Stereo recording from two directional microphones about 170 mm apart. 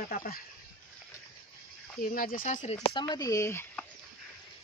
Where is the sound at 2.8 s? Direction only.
25° left (ahead or behind).